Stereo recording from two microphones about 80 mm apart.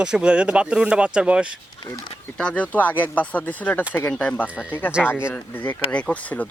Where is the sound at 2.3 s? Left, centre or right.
Centre.